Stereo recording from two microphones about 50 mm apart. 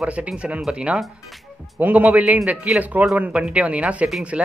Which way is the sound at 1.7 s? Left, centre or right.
Right.